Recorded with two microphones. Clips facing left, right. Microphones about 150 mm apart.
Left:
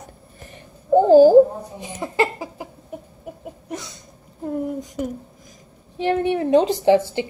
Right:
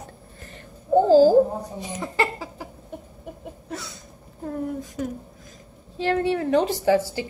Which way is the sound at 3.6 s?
20° left (ahead or behind).